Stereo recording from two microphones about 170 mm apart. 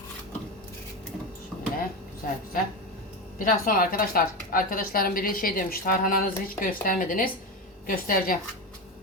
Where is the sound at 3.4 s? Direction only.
55° left (ahead or behind).